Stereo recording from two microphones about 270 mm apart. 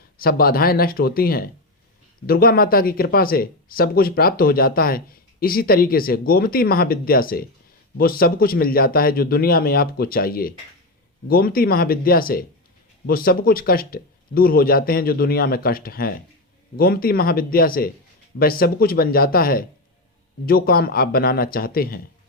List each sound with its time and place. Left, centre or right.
0.2 s speech: left